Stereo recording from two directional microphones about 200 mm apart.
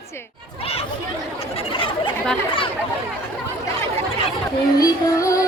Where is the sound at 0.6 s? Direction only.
30° left (ahead or behind).